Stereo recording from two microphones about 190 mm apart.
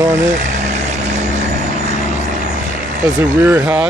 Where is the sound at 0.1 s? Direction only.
40° right (ahead or behind).